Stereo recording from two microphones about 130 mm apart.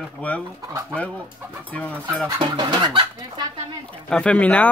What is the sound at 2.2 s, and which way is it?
Fowl, 30° right (ahead or behind).